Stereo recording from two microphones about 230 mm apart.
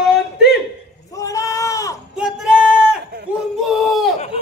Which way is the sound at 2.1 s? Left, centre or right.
Centre.